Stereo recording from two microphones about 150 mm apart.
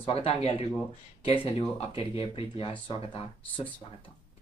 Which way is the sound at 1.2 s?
40° left (ahead or behind).